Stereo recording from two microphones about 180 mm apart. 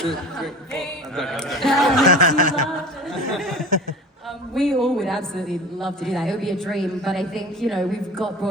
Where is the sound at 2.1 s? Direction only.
45° left (ahead or behind).